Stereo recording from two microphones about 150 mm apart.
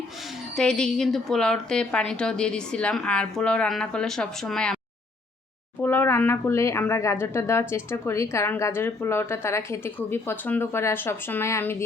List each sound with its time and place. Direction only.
0.5 s a woman's voice: 5° left (ahead or behind)
5.8 s a woman's voice: 15° left (ahead or behind)